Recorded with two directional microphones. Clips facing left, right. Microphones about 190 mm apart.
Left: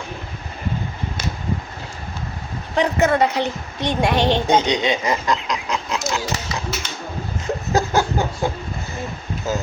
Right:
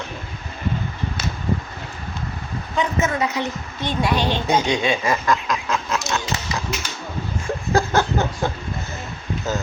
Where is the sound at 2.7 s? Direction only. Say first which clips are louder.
Left 4 dB; 70° left (ahead or behind).